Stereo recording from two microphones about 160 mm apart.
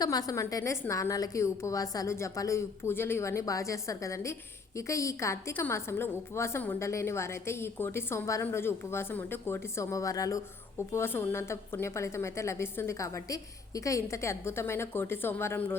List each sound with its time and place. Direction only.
0.0 s a woman's voice: 25° left (ahead or behind)